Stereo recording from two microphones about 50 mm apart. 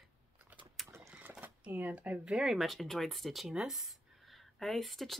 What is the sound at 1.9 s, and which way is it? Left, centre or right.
Speech, right.